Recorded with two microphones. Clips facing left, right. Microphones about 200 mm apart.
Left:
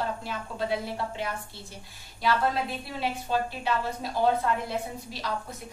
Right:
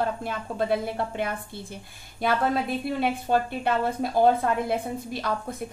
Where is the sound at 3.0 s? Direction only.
55° right (ahead or behind).